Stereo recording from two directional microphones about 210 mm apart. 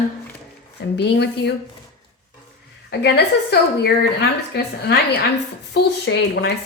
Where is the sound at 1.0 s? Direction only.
55° left (ahead or behind).